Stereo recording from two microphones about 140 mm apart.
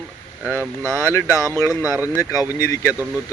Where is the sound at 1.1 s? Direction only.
20° left (ahead or behind).